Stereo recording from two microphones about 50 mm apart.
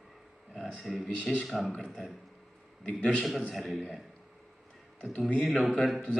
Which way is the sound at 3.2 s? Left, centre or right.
Centre.